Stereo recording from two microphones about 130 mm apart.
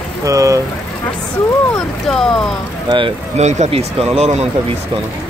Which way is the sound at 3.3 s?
60° right (ahead or behind).